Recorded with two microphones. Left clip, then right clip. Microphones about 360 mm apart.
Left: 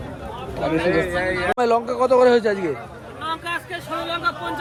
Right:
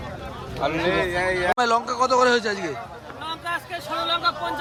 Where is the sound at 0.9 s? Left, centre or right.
Right.